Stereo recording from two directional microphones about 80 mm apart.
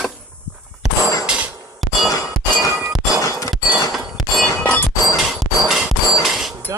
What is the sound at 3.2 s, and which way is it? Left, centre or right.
Shatter, left.